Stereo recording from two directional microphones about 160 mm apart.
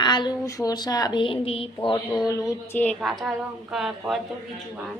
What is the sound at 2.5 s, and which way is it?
Speech, 15° left (ahead or behind).